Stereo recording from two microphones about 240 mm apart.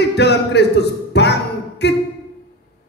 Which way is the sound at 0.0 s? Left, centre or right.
Left.